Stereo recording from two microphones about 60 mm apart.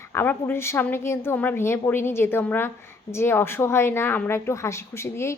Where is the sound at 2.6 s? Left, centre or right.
Left.